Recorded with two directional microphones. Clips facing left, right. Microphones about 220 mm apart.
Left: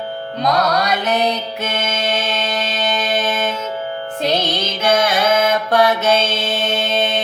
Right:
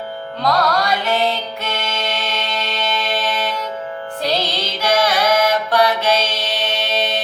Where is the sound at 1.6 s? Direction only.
50° left (ahead or behind).